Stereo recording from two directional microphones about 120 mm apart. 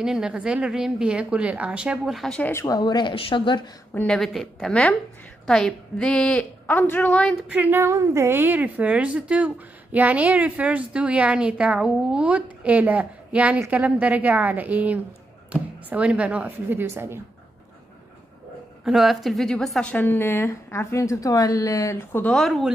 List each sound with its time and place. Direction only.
0.0 s a woman's voice: 5° right (ahead or behind)
2.4 s a woman's voice: 25° left (ahead or behind)
2.8 s speech: 40° left (ahead or behind)
3.9 s a woman's voice: 10° left (ahead or behind)
7.4 s a woman's voice: 15° right (ahead or behind)
18.9 s a woman's voice: centre (ahead or behind)
19.9 s a woman's voice: 15° left (ahead or behind)
22.3 s a woman's voice: centre (ahead or behind)